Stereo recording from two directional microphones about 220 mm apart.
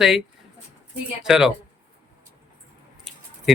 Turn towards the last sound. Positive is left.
turn(degrees=0)  # may be behind; listen again after turning